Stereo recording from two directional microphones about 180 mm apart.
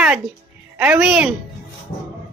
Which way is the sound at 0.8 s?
5° right (ahead or behind).